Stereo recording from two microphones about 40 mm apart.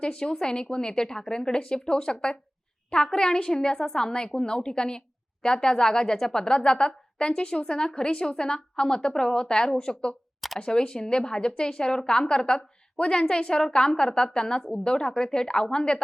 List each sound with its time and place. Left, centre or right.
0.0 s a woman's voice: left